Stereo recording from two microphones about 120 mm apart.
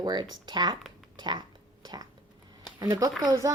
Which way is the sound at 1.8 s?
35° right (ahead or behind).